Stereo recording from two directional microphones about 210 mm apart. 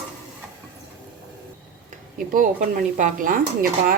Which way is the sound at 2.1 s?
40° right (ahead or behind).